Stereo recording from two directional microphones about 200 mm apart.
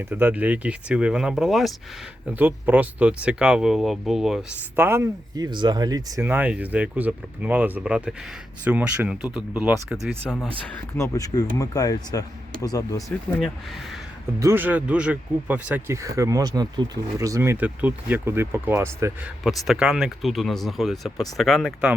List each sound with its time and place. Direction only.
0.0 s speech: 10° right (ahead or behind)
4.8 s speech: 15° right (ahead or behind)
9.2 s speech: 20° left (ahead or behind)
9.9 s speech: centre (ahead or behind)
10.9 s speech: 15° left (ahead or behind)
14.3 s speech: 10° right (ahead or behind)
19.5 s speech: 5° right (ahead or behind)